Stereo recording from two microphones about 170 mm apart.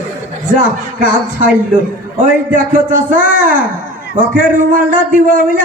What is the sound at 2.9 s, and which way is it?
A man's voice, 50° right (ahead or behind).